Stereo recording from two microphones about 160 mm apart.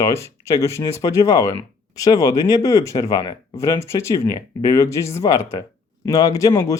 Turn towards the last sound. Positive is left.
turn(degrees=20)  # may be behind; listen again after turning